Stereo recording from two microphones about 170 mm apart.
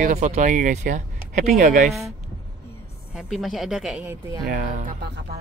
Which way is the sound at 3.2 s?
Centre (ahead or behind).